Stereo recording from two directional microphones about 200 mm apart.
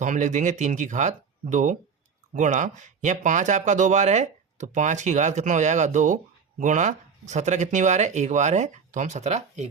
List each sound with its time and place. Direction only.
0.0 s speech: 40° right (ahead or behind)